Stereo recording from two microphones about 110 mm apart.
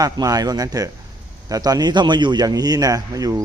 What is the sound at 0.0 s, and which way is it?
A man's voice, 35° right (ahead or behind).